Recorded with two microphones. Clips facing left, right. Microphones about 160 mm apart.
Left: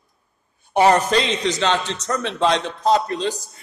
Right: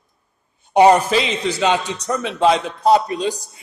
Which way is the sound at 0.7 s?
15° right (ahead or behind).